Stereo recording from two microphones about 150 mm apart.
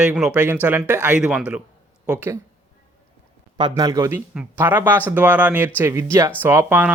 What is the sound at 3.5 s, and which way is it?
Speech, 30° right (ahead or behind).